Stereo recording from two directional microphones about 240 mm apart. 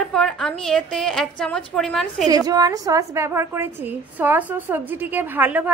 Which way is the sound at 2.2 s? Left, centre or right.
Centre.